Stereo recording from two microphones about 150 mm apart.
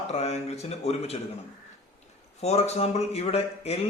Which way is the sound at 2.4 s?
45° left (ahead or behind).